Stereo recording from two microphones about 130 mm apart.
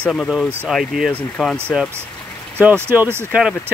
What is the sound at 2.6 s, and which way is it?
Speech, 15° right (ahead or behind).